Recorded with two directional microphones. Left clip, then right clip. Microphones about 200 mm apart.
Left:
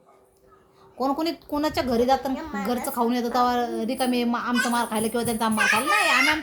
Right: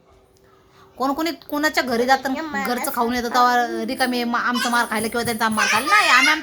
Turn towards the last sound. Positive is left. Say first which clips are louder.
# right 5 dB
turn(degrees=5)  # may be behind; listen again after turning